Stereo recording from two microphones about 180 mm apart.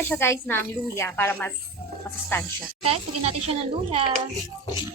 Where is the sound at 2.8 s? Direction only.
35° right (ahead or behind).